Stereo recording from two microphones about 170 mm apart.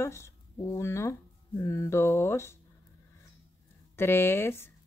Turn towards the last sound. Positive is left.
turn(degrees=15)  # may be behind; listen again after turning